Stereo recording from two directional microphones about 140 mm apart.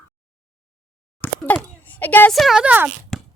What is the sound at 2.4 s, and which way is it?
Speech, 5° right (ahead or behind).